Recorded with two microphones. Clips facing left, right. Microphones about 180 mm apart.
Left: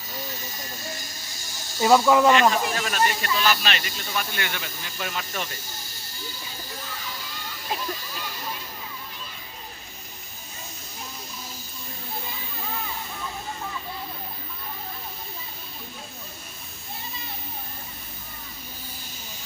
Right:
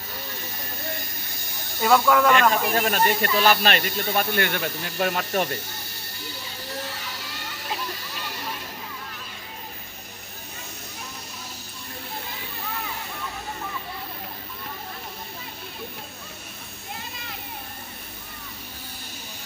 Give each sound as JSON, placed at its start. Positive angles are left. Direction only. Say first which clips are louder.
{"t": 0.1, "sound": "a sound", "louder": "left 2 dB", "side_deg": -60}
{"t": 2.0, "sound": "speech", "louder": "left 2 dB", "side_deg": 20}
{"t": 2.3, "sound": "speech", "louder": "even", "side_deg": -55}